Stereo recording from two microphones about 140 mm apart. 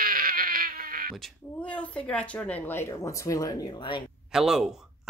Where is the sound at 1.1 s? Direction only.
5° left (ahead or behind); by 4.0 s 35° left (ahead or behind).